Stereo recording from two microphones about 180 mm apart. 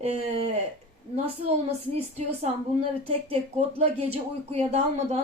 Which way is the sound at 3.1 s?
35° right (ahead or behind).